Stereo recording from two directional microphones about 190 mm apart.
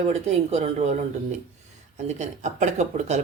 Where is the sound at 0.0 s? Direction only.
35° right (ahead or behind).